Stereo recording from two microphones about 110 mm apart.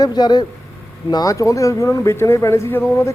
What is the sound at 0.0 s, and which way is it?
A man's voice, 40° left (ahead or behind).